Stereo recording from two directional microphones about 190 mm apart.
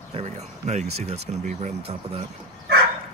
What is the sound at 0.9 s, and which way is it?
Speech, 35° right (ahead or behind).